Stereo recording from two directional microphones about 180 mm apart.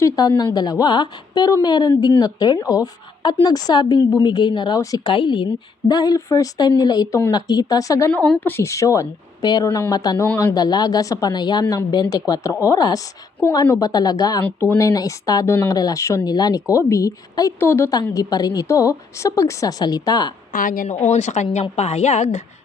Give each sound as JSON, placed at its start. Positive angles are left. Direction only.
{"t": 0.0, "sound": "speech", "side_deg": 20}
{"t": 8.1, "sound": "a woman's voice", "side_deg": 5}
{"t": 20.5, "sound": "a woman's voice", "side_deg": 50}